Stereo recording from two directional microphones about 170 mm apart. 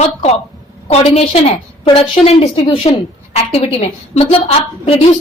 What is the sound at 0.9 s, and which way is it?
A woman's voice, 40° left (ahead or behind).